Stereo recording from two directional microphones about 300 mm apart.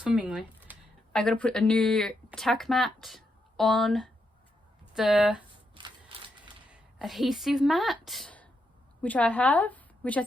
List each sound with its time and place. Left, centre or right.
0.0 s speech: centre
6.7 s a woman's voice: centre